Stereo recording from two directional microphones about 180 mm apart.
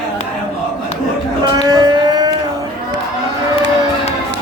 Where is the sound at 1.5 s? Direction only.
20° right (ahead or behind).